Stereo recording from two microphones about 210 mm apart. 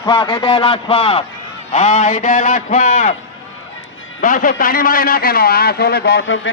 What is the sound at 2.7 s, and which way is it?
Speech, 30° left (ahead or behind).